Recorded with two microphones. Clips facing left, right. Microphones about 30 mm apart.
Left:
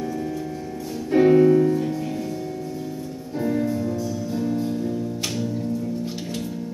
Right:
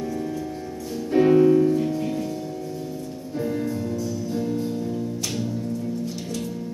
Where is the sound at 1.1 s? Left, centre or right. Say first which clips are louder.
Left 1 dB; centre.